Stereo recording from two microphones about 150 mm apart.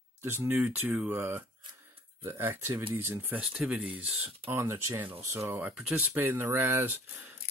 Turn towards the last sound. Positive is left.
turn(degrees=-15)  # may be behind; listen again after turning